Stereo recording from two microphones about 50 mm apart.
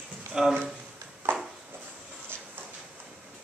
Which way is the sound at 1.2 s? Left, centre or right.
Right.